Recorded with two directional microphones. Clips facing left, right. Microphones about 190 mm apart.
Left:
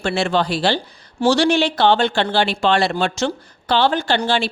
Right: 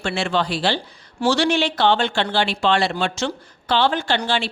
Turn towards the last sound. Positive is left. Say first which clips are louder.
# left 3 dB
turn(degrees=40)  # may be behind; listen again after turning